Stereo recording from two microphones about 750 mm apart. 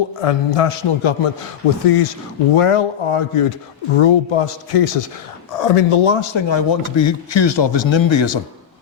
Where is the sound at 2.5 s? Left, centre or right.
Left.